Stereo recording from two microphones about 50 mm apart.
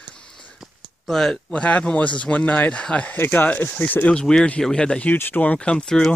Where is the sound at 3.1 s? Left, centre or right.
Left.